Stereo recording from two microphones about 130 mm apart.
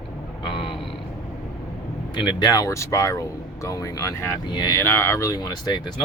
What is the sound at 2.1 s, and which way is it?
Speech, 35° left (ahead or behind).